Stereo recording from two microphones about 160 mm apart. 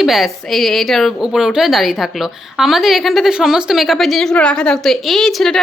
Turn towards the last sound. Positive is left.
turn(degrees=5)  # may be behind; listen again after turning